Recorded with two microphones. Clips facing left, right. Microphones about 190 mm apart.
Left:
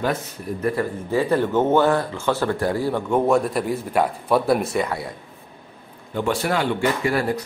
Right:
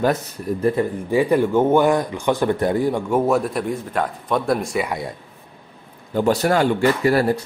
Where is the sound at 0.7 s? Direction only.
20° right (ahead or behind).